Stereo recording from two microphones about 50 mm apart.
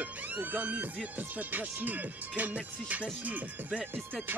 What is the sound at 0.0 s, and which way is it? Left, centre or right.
Music, right.